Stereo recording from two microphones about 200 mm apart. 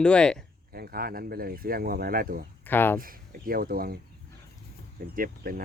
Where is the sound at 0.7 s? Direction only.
50° right (ahead or behind).